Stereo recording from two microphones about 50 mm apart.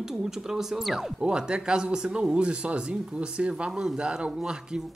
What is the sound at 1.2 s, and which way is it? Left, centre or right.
Speech, centre.